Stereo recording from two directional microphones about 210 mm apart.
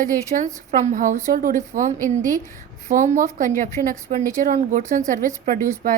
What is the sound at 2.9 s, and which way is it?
A woman's voice, 35° right (ahead or behind).